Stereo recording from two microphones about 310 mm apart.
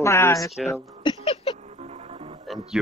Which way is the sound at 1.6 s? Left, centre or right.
Right.